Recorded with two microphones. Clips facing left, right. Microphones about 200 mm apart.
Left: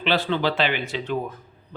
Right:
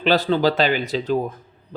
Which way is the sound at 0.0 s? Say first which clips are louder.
Right 5 dB; 40° right (ahead or behind).